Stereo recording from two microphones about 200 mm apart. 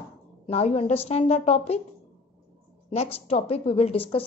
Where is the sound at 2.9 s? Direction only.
30° left (ahead or behind).